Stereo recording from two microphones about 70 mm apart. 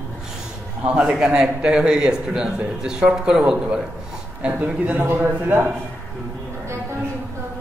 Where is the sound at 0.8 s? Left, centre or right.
Centre.